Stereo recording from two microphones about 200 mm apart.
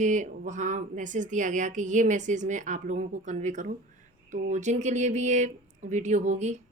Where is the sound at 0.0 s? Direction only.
40° right (ahead or behind).